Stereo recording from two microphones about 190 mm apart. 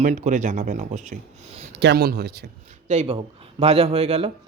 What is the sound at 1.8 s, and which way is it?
Speech, 60° right (ahead or behind).